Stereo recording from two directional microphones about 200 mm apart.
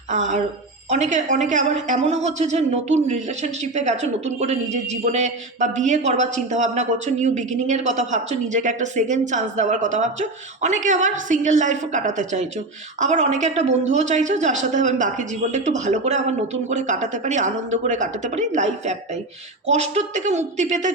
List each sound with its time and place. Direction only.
0.1 s a woman's voice: 35° right (ahead or behind)